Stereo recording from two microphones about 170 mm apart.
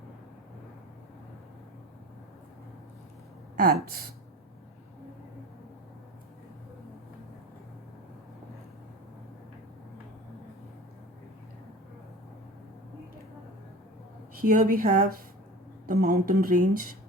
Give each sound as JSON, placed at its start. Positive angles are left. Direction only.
{"t": 3.6, "sound": "speech", "side_deg": -60}
{"t": 14.4, "sound": "speech", "side_deg": -55}